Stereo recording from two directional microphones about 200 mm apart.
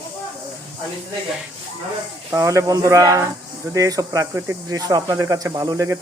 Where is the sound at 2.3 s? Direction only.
15° right (ahead or behind).